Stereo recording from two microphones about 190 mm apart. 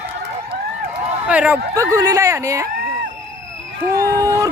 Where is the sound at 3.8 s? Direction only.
20° right (ahead or behind).